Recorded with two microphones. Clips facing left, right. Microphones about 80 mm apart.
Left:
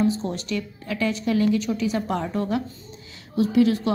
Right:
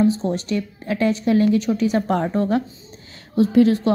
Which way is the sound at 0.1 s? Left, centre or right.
Right.